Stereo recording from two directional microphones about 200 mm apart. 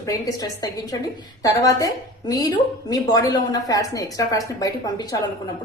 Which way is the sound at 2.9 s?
20° left (ahead or behind).